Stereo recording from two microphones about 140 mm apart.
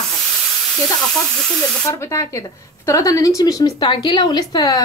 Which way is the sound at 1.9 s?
20° left (ahead or behind).